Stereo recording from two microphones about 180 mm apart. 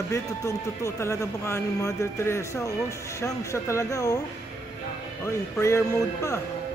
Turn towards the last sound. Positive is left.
turn(degrees=15)  # may be behind; listen again after turning